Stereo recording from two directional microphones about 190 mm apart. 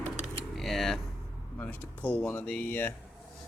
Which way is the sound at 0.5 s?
Centre (ahead or behind).